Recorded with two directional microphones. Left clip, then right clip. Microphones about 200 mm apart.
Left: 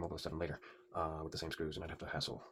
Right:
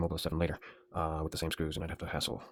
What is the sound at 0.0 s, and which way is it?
Speech, 50° right (ahead or behind).